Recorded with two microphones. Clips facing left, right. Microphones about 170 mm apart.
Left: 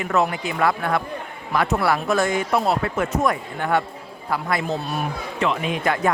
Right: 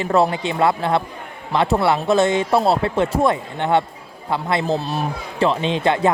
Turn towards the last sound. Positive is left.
turn(degrees=-25)  # may be behind; listen again after turning